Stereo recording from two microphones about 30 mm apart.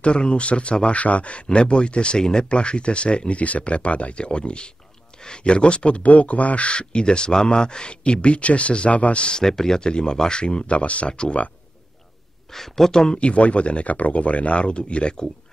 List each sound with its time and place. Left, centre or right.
0.0 s speech: left
2.1 s speech: left
2.5 s speech: left
6.0 s speech: left
9.3 s speech: centre
9.8 s speech: left
10.7 s speech: left
11.1 s speech: left
12.5 s speech: centre
12.9 s speech: left
13.2 s speech: left
13.8 s speech: left